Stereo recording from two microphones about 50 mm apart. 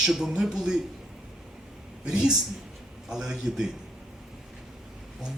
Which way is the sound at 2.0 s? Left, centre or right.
Centre.